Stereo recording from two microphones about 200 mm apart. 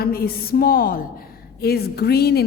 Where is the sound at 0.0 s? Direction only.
50° left (ahead or behind).